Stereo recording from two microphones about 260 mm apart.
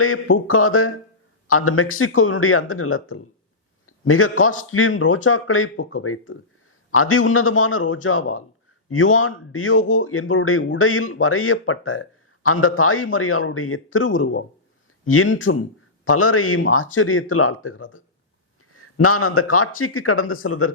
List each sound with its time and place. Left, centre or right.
0.0 s speech: left